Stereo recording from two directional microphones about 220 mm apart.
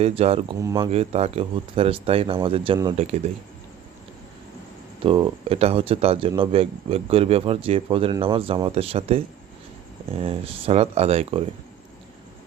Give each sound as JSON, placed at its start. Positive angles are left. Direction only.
{"t": 0.0, "sound": "speech", "side_deg": -25}
{"t": 0.6, "sound": "speech", "side_deg": -15}
{"t": 0.9, "sound": "speech", "side_deg": -25}
{"t": 5.0, "sound": "speech", "side_deg": -25}